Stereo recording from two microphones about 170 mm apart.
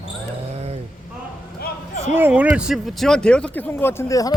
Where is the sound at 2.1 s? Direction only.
10° right (ahead or behind).